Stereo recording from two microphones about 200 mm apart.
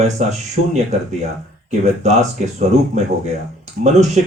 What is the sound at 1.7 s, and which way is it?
Speech, 35° right (ahead or behind).